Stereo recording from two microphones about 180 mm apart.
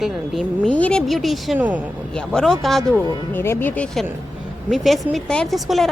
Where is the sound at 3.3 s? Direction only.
10° left (ahead or behind).